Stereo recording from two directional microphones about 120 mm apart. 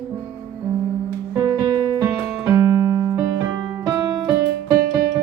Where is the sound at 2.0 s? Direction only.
15° right (ahead or behind).